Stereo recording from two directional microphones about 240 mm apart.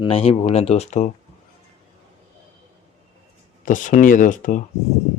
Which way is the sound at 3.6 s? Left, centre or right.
Left.